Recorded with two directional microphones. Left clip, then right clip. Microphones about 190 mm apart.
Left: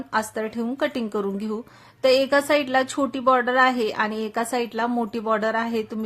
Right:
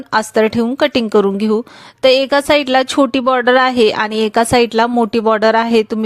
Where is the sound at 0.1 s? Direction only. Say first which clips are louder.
Right 12 dB; 40° right (ahead or behind).